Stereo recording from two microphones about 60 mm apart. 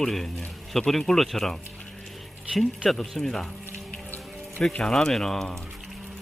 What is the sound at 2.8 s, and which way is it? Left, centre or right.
Speech, centre.